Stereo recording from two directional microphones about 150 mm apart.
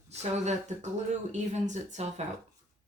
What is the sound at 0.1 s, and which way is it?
A woman's voice, 50° right (ahead or behind).